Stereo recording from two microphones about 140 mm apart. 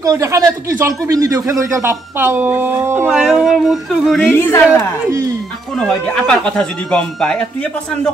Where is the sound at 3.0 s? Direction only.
5° right (ahead or behind).